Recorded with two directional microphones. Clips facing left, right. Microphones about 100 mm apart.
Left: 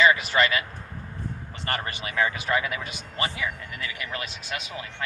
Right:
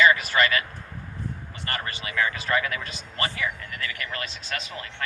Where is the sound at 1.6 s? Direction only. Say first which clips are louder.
Left 2 dB; 25° left (ahead or behind).